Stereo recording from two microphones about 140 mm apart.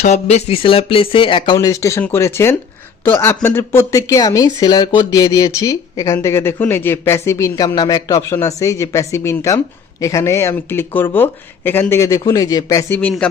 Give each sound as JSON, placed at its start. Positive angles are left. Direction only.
{"t": 0.3, "sound": "speech", "side_deg": 50}
{"t": 1.5, "sound": "speech", "side_deg": 25}
{"t": 12.9, "sound": "speech", "side_deg": 10}